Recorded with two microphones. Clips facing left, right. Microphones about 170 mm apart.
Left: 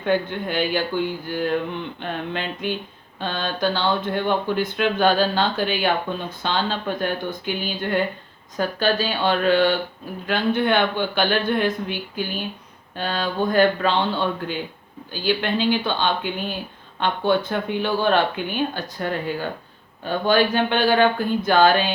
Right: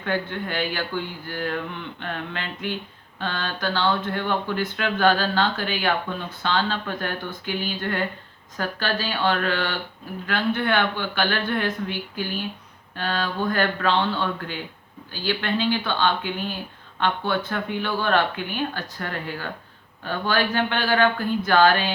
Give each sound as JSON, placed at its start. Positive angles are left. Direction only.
{"t": 0.0, "sound": "speech", "side_deg": 20}